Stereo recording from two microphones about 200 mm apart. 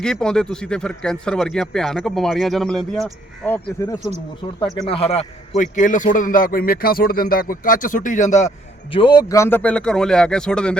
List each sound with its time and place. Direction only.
0.0 s speech: 5° left (ahead or behind)
4.9 s a man's voice: 30° left (ahead or behind)
8.9 s speech: 25° left (ahead or behind); by 10.8 s 5° left (ahead or behind)